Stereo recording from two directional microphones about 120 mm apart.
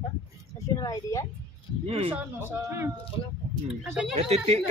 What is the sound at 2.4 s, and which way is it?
Speech, 25° right (ahead or behind).